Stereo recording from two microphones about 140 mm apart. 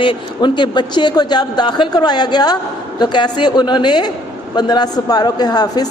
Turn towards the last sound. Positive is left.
turn(degrees=30)  # may be behind; listen again after turning